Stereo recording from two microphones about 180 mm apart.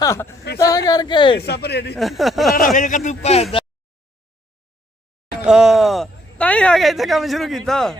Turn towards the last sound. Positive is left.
turn(degrees=0)  # may be behind; listen again after turning